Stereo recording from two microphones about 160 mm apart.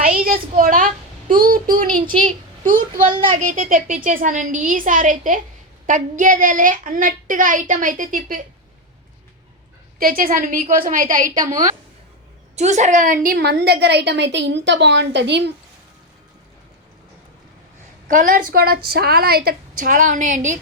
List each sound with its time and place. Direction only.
0.0 s child singing: 60° right (ahead or behind)
2.7 s a child's voice: 55° right (ahead or behind)
10.0 s a child's voice: 65° right (ahead or behind)
12.5 s a woman's voice: 45° right (ahead or behind); by 15.5 s 90° right
18.1 s a child's voice: 55° right (ahead or behind)